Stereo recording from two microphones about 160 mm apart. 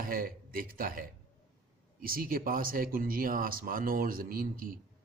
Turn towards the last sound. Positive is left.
turn(degrees=-65)  # may be behind; listen again after turning